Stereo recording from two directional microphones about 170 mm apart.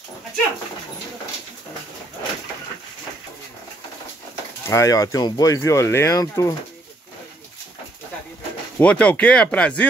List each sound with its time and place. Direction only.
4.6 s speech: 20° left (ahead or behind)
8.7 s speech: 5° left (ahead or behind)